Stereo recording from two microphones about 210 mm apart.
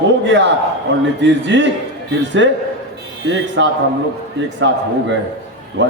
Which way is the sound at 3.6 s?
60° right (ahead or behind).